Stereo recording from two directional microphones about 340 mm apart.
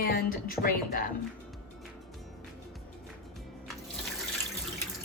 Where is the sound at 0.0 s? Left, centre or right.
Left.